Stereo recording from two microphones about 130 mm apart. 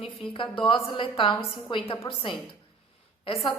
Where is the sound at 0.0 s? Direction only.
45° left (ahead or behind).